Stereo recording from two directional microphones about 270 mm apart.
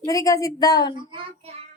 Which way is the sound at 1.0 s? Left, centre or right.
Centre.